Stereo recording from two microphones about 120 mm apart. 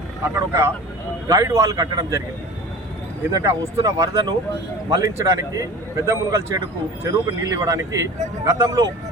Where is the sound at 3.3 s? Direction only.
25° right (ahead or behind).